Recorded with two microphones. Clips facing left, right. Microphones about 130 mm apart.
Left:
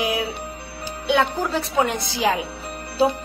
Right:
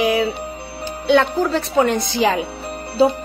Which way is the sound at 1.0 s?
10° left (ahead or behind).